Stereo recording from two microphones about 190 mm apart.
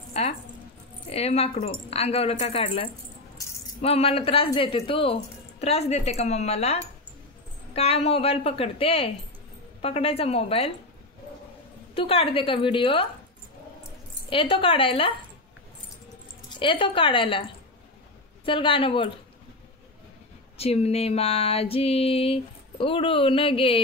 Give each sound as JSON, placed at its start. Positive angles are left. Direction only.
{"t": 0.1, "sound": "speech", "side_deg": 35}
{"t": 1.1, "sound": "a sound", "side_deg": 30}
{"t": 11.9, "sound": "a woman's voice", "side_deg": 30}
{"t": 14.3, "sound": "a woman's voice", "side_deg": 30}
{"t": 16.5, "sound": "a woman's voice", "side_deg": 25}
{"t": 20.5, "sound": "a sound", "side_deg": 30}